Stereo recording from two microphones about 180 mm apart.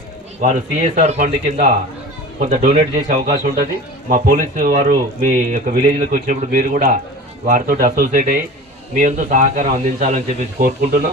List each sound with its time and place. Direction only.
1.0 s speech: 40° right (ahead or behind)